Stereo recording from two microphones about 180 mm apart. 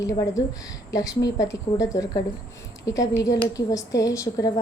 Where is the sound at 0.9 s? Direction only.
20° left (ahead or behind).